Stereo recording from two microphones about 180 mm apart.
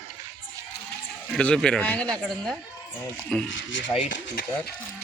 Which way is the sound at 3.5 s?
90° left.